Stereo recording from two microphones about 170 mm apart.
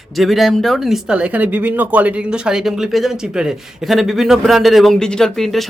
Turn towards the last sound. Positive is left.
turn(degrees=0)  # may be behind; listen again after turning